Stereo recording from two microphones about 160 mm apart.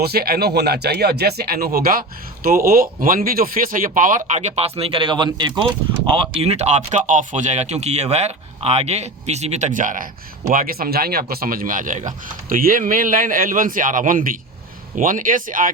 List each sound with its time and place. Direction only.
0.0 s speech: 75° right (ahead or behind); by 4.2 s 55° right (ahead or behind)
4.3 s speech: 45° right (ahead or behind)